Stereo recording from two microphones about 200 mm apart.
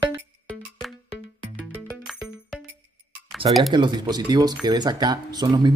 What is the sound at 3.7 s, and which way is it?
Speech, 20° right (ahead or behind).